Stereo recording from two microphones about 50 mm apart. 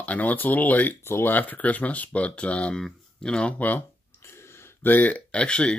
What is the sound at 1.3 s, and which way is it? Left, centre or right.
Speech, left.